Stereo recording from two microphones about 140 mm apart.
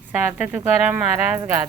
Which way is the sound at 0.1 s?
10° right (ahead or behind).